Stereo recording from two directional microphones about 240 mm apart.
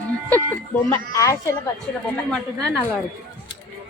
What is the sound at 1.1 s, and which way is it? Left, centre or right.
Speech, centre.